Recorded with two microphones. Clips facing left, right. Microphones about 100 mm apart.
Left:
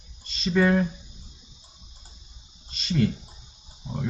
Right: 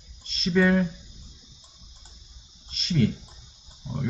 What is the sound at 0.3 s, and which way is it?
Speech, centre (ahead or behind).